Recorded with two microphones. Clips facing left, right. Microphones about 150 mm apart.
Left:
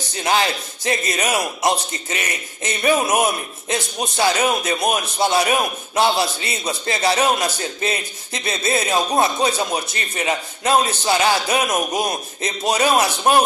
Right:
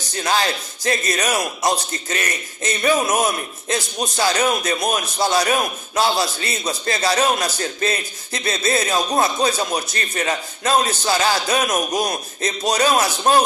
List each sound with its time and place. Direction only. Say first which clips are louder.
0.2 s speech: left 1 dB; 20° left (ahead or behind)